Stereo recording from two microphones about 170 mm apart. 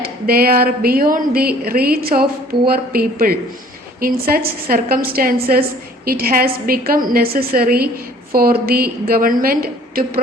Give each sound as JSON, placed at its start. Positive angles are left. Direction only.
{"t": 0.0, "sound": "a woman's voice", "side_deg": -60}